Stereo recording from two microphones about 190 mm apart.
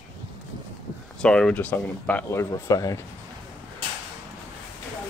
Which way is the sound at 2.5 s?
20° left (ahead or behind).